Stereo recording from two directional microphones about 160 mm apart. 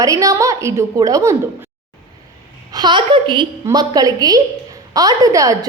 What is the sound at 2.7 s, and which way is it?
A woman's voice, 30° right (ahead or behind).